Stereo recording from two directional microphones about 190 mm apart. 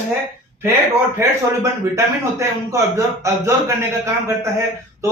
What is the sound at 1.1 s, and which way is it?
A man's voice, 15° right (ahead or behind).